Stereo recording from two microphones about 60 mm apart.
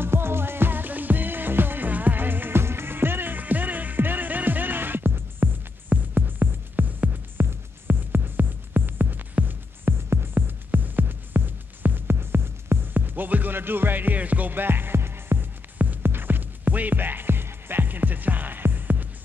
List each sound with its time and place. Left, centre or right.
0.0 s music: right